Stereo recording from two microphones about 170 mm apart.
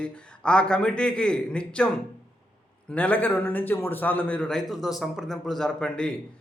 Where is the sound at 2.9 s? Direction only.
10° left (ahead or behind).